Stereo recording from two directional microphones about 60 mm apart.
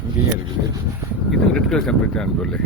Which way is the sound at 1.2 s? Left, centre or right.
Centre.